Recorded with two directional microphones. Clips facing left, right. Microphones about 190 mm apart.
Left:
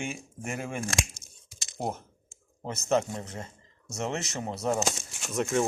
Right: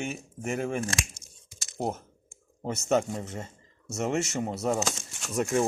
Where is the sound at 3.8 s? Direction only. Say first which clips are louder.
Right 3 dB; 5° right (ahead or behind).